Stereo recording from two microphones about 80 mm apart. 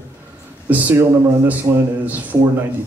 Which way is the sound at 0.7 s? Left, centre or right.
Right.